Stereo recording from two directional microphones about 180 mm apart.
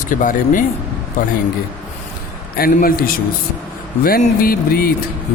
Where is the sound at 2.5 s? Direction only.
55° left (ahead or behind).